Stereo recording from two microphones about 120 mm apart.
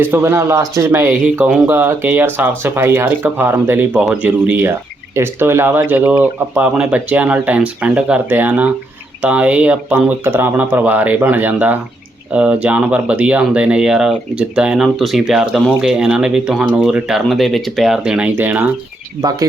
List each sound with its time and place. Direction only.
0.0 s speech: 20° right (ahead or behind)
19.2 s speech: 35° right (ahead or behind)